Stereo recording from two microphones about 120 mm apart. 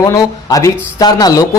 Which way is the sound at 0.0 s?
30° left (ahead or behind).